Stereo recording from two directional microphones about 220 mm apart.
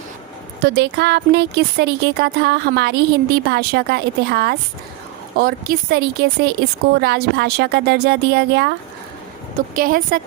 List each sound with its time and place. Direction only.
0.6 s a woman's voice: 50° right (ahead or behind)